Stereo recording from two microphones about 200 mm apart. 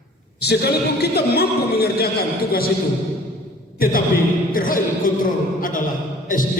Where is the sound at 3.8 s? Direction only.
45° left (ahead or behind).